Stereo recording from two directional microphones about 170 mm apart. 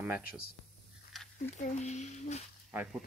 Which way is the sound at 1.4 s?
45° left (ahead or behind).